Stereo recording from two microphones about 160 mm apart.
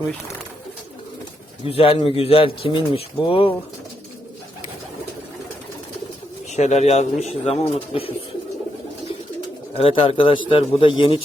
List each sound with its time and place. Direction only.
1.6 s a man's voice: 35° left (ahead or behind)
6.5 s speech: 45° left (ahead or behind)
9.7 s a man's voice: 35° left (ahead or behind)